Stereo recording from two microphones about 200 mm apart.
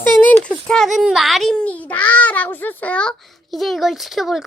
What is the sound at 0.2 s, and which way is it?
A child's voice, 5° left (ahead or behind).